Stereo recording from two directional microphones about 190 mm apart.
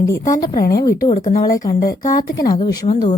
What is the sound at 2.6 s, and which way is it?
Speech, 35° left (ahead or behind).